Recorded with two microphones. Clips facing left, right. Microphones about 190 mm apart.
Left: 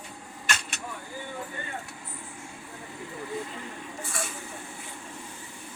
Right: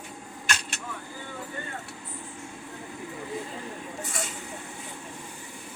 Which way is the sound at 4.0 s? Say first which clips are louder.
Left 1 dB; 20° right (ahead or behind).